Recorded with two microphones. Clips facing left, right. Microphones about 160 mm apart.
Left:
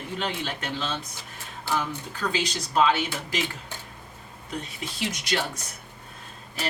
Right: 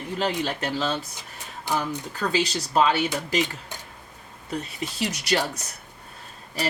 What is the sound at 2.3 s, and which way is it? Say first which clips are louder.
Speech: right 4 dB; 35° right (ahead or behind).